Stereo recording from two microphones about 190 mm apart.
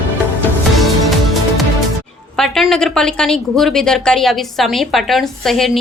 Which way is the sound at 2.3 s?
Centre (ahead or behind).